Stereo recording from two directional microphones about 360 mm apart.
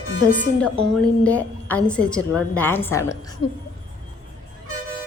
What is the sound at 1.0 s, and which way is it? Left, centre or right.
A woman's voice, centre.